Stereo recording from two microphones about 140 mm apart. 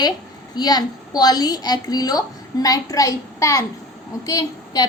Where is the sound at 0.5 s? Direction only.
30° left (ahead or behind).